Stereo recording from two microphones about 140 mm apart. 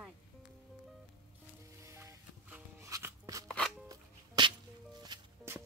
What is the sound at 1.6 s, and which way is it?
Music, 20° right (ahead or behind).